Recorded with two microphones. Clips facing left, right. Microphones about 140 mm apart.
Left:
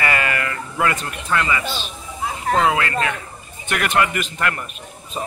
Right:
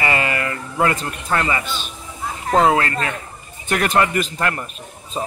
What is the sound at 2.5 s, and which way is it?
A man's voice, 35° right (ahead or behind).